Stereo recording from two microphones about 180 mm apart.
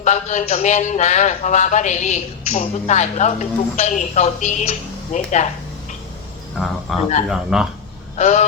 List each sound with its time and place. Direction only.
0.0 s a man's voice: 40° left (ahead or behind)
6.6 s speech: 5° left (ahead or behind)
8.2 s a man's voice: 40° left (ahead or behind)